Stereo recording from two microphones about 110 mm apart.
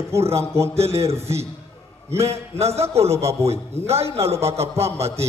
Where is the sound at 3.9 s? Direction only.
70° right (ahead or behind).